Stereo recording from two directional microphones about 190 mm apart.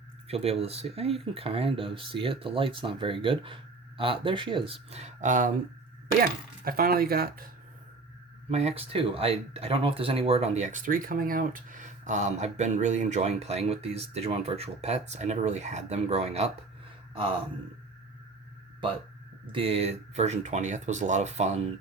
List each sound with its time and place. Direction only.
0.3 s speech: 30° right (ahead or behind); by 7.5 s 50° right (ahead or behind)
8.4 s speech: 35° right (ahead or behind)
19.5 s speech: 30° right (ahead or behind)